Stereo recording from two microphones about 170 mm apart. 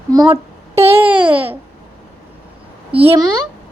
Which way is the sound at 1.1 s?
30° right (ahead or behind).